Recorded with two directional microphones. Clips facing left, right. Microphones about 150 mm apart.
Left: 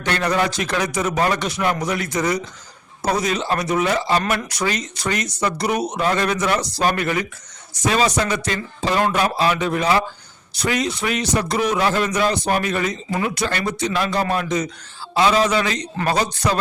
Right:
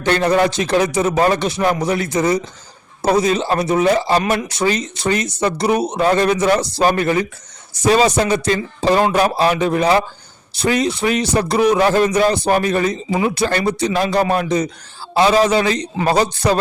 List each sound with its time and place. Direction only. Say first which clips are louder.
0.0 s speech: right 6 dB; 30° right (ahead or behind)